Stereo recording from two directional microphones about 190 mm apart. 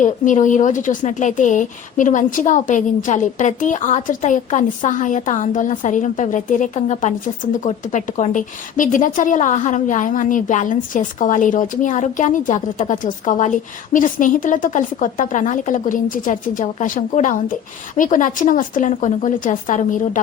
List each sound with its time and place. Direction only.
0.0 s a woman's voice: 40° left (ahead or behind)